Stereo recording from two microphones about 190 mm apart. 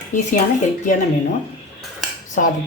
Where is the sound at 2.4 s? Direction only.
45° left (ahead or behind).